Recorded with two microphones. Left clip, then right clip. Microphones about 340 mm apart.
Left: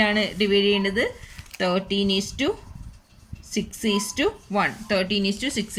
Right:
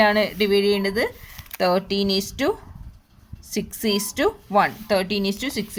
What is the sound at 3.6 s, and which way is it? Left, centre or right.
A woman's voice, centre.